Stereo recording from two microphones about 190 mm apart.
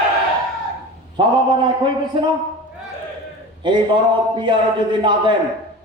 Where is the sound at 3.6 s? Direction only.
25° right (ahead or behind).